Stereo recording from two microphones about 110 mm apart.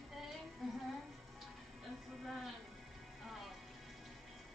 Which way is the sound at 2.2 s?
Centre (ahead or behind).